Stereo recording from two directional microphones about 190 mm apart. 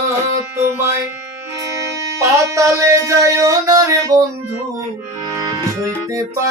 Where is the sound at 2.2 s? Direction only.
15° right (ahead or behind).